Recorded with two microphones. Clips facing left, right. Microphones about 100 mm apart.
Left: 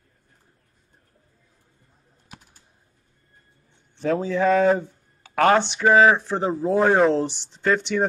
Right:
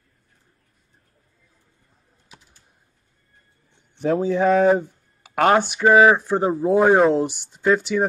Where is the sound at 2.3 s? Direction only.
55° left (ahead or behind).